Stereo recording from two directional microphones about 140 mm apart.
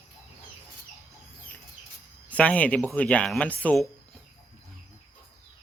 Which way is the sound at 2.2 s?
10° left (ahead or behind).